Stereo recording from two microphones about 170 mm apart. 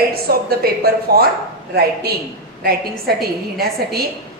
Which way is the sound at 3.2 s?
65° right (ahead or behind).